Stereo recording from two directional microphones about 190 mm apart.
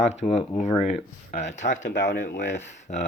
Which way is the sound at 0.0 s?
35° left (ahead or behind).